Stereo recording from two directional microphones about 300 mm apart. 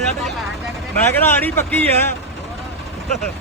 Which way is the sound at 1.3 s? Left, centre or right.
Centre.